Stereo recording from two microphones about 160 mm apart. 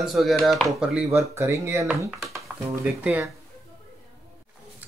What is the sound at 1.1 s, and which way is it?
Speech, 15° right (ahead or behind).